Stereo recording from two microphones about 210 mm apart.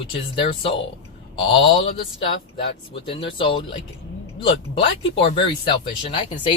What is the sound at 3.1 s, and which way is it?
Speech, 25° left (ahead or behind).